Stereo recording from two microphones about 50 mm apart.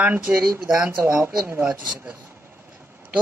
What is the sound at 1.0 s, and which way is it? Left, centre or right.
Speech, right.